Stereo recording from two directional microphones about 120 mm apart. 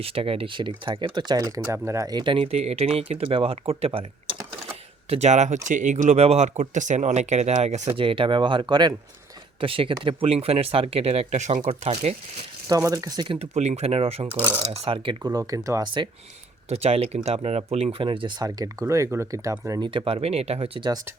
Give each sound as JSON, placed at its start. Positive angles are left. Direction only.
{"t": 0.0, "sound": "speech", "side_deg": -50}
{"t": 1.7, "sound": "speech", "side_deg": -25}
{"t": 5.0, "sound": "speech", "side_deg": -60}
{"t": 7.9, "sound": "speech", "side_deg": -50}
{"t": 12.6, "sound": "speech", "side_deg": -30}
{"t": 13.5, "sound": "speech", "side_deg": -65}
{"t": 15.2, "sound": "speech", "side_deg": -30}
{"t": 16.6, "sound": "speech", "side_deg": -60}
{"t": 19.8, "sound": "speech", "side_deg": -45}